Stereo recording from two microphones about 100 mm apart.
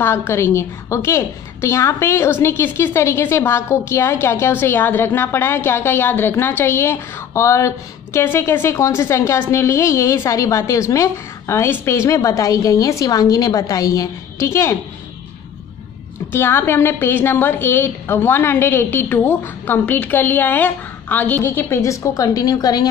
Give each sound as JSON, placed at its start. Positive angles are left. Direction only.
{"t": 0.0, "sound": "a woman's voice", "side_deg": 25}
{"t": 16.3, "sound": "a woman's voice", "side_deg": 25}